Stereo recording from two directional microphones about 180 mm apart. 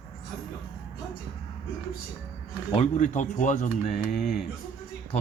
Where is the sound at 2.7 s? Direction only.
40° left (ahead or behind).